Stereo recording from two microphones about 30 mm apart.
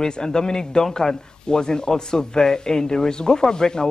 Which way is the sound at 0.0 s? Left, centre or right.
Left.